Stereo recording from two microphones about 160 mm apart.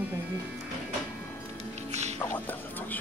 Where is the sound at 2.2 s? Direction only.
10° left (ahead or behind).